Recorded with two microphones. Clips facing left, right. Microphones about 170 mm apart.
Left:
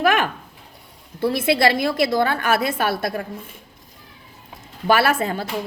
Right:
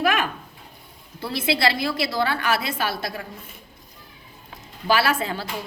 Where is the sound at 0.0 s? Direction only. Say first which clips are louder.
Left 4 dB; 50° left (ahead or behind).